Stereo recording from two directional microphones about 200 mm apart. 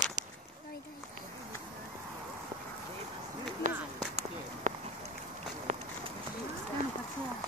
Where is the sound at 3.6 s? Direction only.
40° right (ahead or behind).